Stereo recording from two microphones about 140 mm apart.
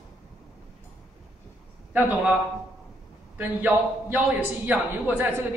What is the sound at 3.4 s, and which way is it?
A man's voice, 15° right (ahead or behind).